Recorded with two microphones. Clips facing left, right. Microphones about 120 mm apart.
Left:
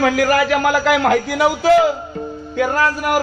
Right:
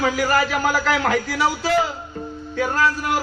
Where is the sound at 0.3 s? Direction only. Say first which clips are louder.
Left 4 dB; 65° left (ahead or behind).